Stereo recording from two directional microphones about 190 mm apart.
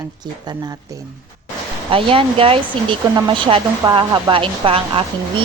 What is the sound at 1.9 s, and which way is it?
Speech, 30° right (ahead or behind).